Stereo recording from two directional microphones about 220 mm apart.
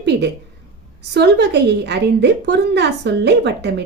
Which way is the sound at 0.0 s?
50° right (ahead or behind).